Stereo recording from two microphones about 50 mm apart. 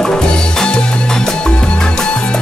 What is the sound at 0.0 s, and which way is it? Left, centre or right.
Music, centre.